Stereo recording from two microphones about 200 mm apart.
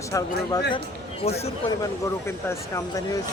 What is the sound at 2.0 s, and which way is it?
A man's voice, 15° left (ahead or behind).